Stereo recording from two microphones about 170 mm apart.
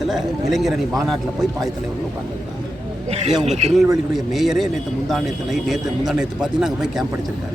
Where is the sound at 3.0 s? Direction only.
40° right (ahead or behind).